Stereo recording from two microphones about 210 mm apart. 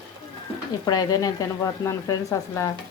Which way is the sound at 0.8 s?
20° left (ahead or behind).